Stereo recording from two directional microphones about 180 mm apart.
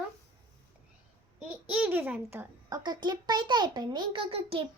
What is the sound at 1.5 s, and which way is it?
A child's voice, 5° right (ahead or behind).